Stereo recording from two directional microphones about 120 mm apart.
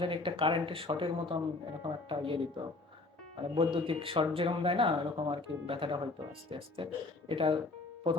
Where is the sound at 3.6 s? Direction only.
45° right (ahead or behind).